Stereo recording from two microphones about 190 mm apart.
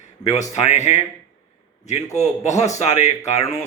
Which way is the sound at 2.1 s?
35° left (ahead or behind).